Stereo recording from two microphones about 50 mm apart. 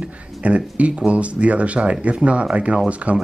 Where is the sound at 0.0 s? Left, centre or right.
Right.